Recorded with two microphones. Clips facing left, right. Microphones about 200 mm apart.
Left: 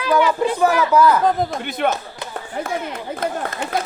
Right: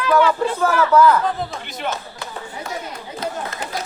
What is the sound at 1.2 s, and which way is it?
A man's voice, 50° left (ahead or behind).